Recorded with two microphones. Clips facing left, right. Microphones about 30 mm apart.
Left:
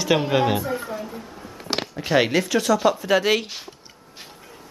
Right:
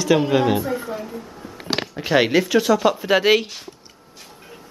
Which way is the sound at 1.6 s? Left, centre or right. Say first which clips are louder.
Right 2 dB; right.